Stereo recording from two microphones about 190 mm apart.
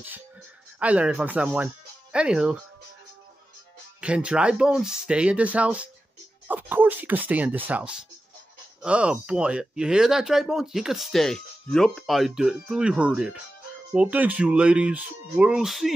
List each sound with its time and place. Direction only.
0.7 s speech: 5° right (ahead or behind)
4.0 s speech: 5° right (ahead or behind)